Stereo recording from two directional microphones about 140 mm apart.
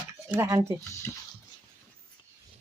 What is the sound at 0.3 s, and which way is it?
Speech, 20° right (ahead or behind).